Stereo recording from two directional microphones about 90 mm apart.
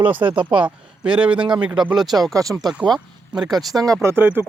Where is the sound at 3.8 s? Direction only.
35° right (ahead or behind).